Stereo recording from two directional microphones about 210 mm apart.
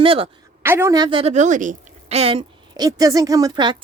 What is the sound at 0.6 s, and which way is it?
A woman's voice, 10° right (ahead or behind).